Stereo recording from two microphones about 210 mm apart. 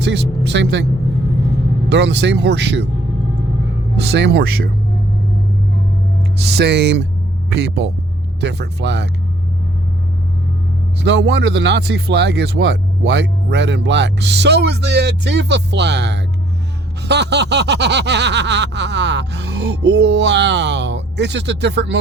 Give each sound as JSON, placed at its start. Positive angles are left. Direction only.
{"t": 0.0, "sound": "speech", "side_deg": -55}
{"t": 1.9, "sound": "speech", "side_deg": -55}
{"t": 4.0, "sound": "speech", "side_deg": -50}
{"t": 6.5, "sound": "speech", "side_deg": -50}
{"t": 11.0, "sound": "speech", "side_deg": -55}